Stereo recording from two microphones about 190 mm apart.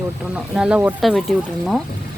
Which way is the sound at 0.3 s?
5° right (ahead or behind).